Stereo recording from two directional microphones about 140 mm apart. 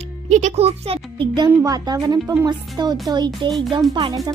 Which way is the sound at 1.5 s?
25° right (ahead or behind).